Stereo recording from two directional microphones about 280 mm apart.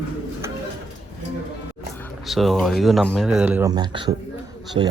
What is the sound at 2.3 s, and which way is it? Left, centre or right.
Speech, centre.